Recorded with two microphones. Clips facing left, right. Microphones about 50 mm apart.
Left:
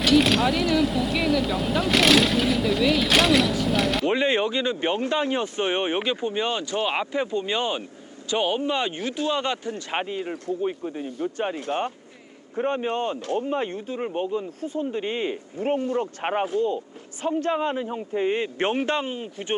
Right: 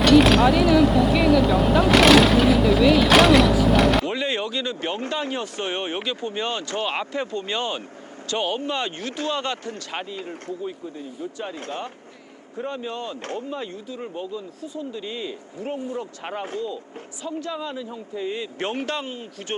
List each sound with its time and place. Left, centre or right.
0.0 s vehicle: centre
4.0 s speech: left